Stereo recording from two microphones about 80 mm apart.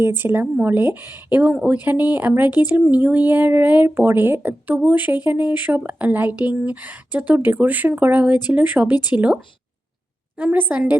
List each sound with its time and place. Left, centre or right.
0.0 s speech: right
1.4 s speech: centre